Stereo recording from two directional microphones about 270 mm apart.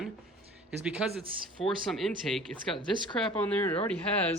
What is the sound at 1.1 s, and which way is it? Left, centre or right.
Speech, centre.